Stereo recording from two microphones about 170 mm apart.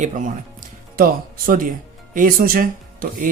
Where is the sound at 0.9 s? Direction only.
55° right (ahead or behind).